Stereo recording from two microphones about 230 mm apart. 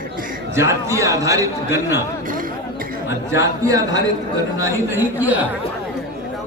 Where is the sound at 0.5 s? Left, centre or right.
Centre.